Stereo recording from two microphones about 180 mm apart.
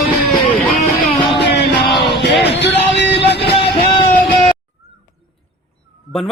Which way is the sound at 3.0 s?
70° left (ahead or behind).